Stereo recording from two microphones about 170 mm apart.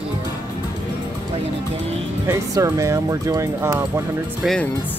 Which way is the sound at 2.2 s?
20° right (ahead or behind).